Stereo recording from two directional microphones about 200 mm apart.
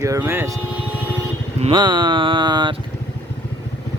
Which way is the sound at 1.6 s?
20° right (ahead or behind).